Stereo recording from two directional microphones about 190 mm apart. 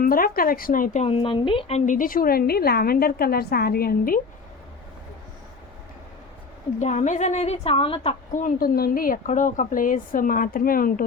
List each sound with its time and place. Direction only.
0.0 s speech: 50° left (ahead or behind)
6.7 s a woman's voice: 40° left (ahead or behind)
8.3 s speech: 45° left (ahead or behind)